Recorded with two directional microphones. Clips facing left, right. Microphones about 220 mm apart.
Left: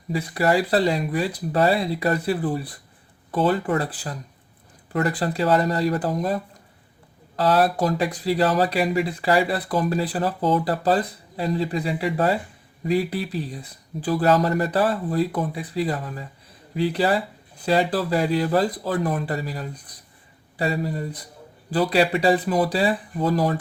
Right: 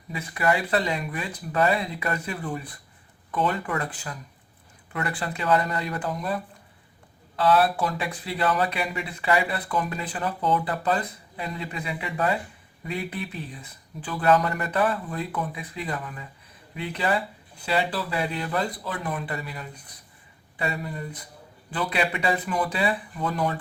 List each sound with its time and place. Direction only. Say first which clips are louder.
0.1 s speech: left 5 dB; 35° left (ahead or behind)